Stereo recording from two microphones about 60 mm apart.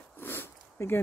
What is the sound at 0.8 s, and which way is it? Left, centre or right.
Speech, left.